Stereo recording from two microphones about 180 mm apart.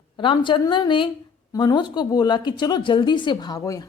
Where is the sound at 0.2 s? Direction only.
25° left (ahead or behind).